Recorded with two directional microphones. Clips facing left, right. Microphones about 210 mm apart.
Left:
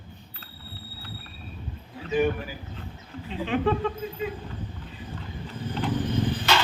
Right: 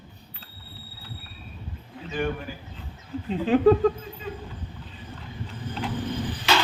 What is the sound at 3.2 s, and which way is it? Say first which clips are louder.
Speech: right 7 dB; 40° right (ahead or behind).